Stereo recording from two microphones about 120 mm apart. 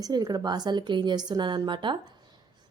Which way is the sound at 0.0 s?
35° right (ahead or behind).